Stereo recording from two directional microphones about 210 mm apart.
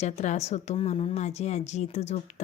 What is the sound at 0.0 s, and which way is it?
A woman's voice, 30° left (ahead or behind).